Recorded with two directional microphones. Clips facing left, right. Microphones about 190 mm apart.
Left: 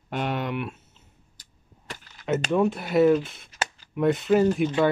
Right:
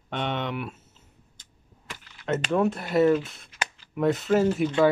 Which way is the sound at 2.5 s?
Centre (ahead or behind).